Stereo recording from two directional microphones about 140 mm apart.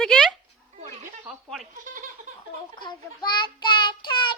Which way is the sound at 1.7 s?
70° right (ahead or behind).